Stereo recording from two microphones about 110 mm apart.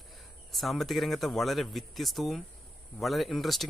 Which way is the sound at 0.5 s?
Centre (ahead or behind).